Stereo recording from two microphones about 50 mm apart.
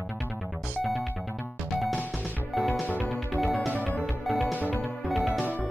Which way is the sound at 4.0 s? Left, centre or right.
Centre.